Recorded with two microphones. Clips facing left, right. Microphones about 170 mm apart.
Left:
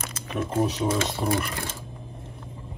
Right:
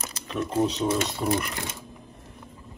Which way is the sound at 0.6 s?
10° left (ahead or behind).